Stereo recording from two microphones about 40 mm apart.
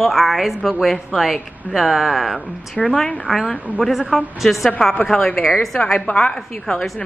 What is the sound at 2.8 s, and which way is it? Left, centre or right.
Speech, centre.